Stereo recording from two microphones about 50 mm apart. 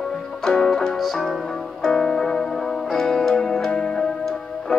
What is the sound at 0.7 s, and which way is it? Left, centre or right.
Music, centre.